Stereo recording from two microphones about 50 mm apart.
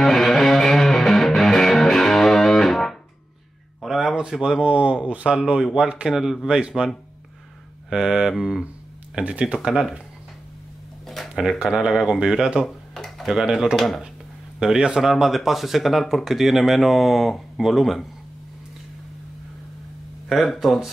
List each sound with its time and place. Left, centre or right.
0.0 s music: centre
4.0 s a sound: centre
5.4 s speech: centre
7.9 s speech: centre
9.2 s speech: right
9.7 s speech: centre
11.1 s a sound: centre
11.4 s speech: centre
12.6 s a sound: centre
13.3 s speech: centre
13.7 s speech: centre
14.6 s speech: centre
20.2 s speech: centre